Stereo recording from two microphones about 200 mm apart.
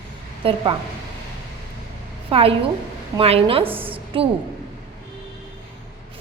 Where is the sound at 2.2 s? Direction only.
30° right (ahead or behind).